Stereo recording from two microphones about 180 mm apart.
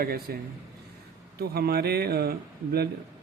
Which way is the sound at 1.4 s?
60° right (ahead or behind).